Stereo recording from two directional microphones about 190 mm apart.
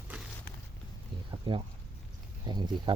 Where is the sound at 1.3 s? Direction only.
25° right (ahead or behind).